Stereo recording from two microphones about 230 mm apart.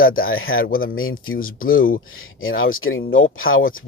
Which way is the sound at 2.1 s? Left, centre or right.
Left.